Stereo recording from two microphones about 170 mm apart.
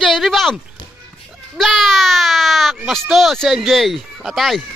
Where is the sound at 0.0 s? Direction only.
Centre (ahead or behind).